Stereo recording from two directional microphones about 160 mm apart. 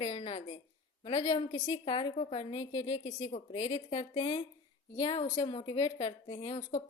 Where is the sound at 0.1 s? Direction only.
40° left (ahead or behind).